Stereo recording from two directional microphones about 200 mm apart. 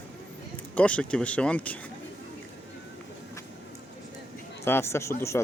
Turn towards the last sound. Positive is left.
turn(degrees=15)  # may be behind; listen again after turning